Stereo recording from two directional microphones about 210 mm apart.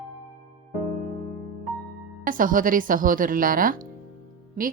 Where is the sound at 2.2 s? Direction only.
40° right (ahead or behind).